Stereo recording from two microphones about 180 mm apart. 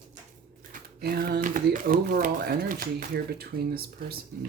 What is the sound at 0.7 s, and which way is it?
Speech, 55° right (ahead or behind).